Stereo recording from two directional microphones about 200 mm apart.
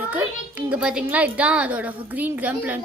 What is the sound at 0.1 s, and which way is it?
A child's voice, 5° right (ahead or behind).